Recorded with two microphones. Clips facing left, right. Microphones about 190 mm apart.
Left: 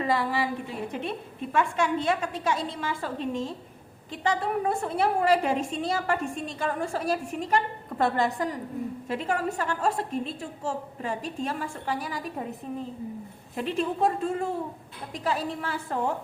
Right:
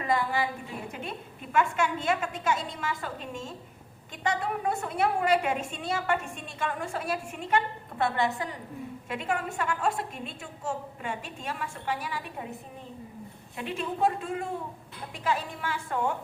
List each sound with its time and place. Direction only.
0.0 s a woman's voice: 35° left (ahead or behind)
1.5 s a woman's voice: 30° left (ahead or behind)
13.6 s a woman's voice: 40° left (ahead or behind)